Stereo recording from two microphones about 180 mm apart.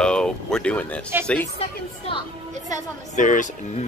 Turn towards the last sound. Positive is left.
turn(degrees=45)  # may be behind; listen again after turning